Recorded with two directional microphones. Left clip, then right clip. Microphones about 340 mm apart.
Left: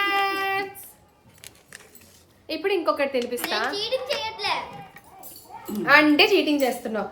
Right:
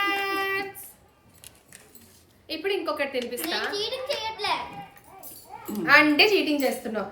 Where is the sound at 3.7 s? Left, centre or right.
Centre.